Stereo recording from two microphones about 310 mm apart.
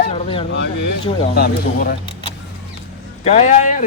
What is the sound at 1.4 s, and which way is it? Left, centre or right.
Speech, left.